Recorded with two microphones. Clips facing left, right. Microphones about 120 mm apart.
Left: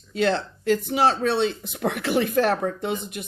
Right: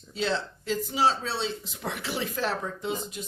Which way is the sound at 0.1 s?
60° left (ahead or behind).